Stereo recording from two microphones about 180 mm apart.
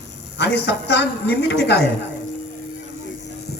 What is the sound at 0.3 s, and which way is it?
A woman's voice, 70° left (ahead or behind).